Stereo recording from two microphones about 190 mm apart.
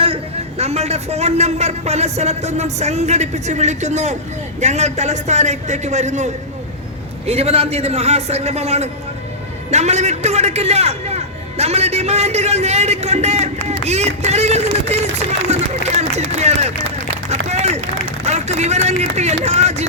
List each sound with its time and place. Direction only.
0.0 s a man's voice: 30° right (ahead or behind)
17.2 s a sound: 35° right (ahead or behind)
18.3 s a man's voice: 35° right (ahead or behind)